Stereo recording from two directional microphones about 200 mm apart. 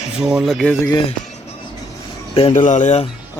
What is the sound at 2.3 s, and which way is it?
Speech, 30° left (ahead or behind).